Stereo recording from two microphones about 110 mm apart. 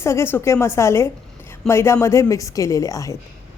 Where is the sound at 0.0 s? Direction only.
25° left (ahead or behind).